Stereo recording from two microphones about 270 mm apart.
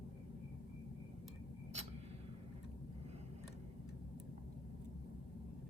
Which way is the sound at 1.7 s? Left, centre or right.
Right.